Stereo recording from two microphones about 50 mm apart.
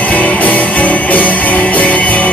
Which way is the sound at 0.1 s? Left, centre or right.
Left.